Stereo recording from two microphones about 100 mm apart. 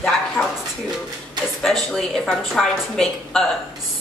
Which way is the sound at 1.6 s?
5° left (ahead or behind).